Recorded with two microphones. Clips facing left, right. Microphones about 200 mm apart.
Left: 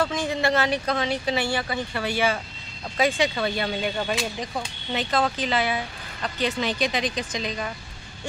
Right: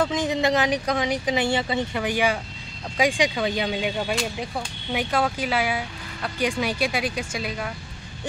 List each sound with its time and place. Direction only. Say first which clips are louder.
0.0 s speech: right 2 dB; 20° right (ahead or behind)